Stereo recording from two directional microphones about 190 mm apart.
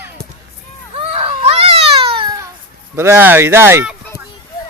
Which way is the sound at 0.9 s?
30° right (ahead or behind).